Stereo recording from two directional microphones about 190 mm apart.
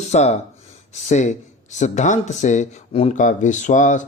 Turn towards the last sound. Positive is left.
turn(degrees=40)  # may be behind; listen again after turning